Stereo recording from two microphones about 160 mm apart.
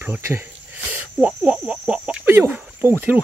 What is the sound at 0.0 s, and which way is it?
Speech, 15° right (ahead or behind).